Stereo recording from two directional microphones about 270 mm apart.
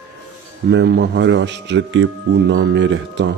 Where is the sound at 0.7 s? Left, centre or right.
Right.